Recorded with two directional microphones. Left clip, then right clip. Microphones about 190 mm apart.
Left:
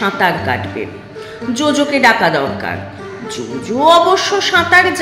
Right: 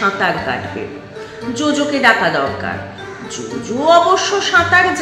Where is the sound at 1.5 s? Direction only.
25° left (ahead or behind).